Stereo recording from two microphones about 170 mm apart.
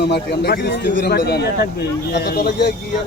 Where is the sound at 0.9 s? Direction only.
70° left (ahead or behind).